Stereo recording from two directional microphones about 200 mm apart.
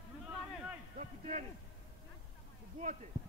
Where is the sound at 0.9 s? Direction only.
35° right (ahead or behind).